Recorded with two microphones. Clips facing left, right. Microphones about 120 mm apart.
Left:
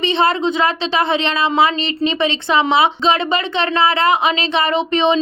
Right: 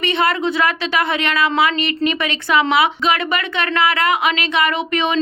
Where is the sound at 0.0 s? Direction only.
25° left (ahead or behind).